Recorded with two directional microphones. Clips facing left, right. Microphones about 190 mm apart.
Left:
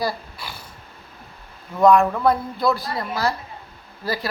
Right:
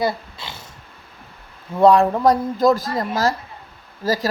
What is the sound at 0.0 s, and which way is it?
Dog, 25° right (ahead or behind).